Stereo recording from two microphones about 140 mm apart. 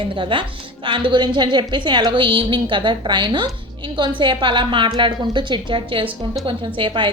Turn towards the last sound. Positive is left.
turn(degrees=-35)  # may be behind; listen again after turning